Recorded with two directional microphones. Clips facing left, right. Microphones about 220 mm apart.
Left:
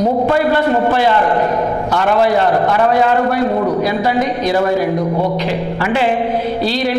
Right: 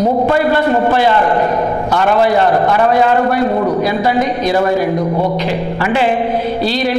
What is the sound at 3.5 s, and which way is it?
Speech, 30° right (ahead or behind).